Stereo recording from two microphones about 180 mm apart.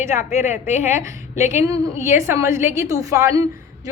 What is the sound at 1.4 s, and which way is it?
Speech, 40° left (ahead or behind).